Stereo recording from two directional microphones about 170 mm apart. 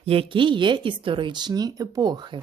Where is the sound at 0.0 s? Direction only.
35° right (ahead or behind).